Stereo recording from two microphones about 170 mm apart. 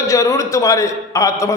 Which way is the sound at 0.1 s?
20° left (ahead or behind).